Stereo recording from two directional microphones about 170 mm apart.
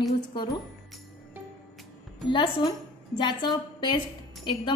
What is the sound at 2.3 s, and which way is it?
A woman's voice, 30° left (ahead or behind).